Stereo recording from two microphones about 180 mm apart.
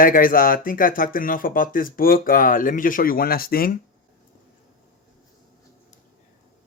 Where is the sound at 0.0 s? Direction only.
50° left (ahead or behind).